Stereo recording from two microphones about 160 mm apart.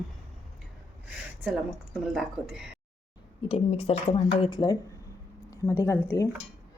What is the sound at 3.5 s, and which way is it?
Speech, 40° left (ahead or behind).